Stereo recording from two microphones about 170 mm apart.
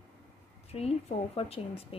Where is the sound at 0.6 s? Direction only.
35° left (ahead or behind).